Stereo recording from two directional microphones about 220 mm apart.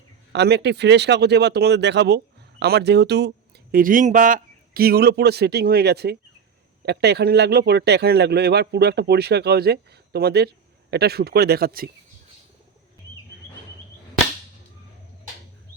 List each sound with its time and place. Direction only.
0.3 s speech: 50° right (ahead or behind)